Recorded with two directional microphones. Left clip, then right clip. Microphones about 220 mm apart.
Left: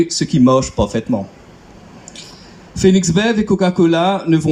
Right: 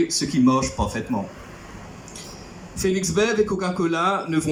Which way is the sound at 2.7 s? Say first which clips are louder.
Left 7 dB; 45° left (ahead or behind).